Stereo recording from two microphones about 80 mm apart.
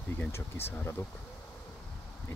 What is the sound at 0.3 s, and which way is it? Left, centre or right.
Speech, left.